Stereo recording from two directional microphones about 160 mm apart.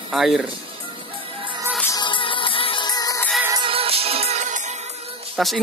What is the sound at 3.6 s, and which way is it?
Music, 35° right (ahead or behind).